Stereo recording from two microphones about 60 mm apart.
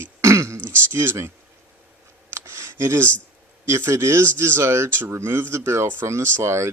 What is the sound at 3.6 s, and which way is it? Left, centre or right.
Speech, right.